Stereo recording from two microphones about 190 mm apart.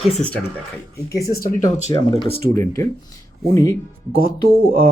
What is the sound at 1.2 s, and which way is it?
Speech, 50° left (ahead or behind).